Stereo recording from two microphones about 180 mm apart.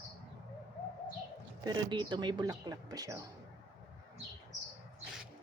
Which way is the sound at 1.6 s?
25° right (ahead or behind).